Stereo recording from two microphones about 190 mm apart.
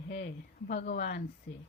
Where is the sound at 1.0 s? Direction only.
65° left (ahead or behind).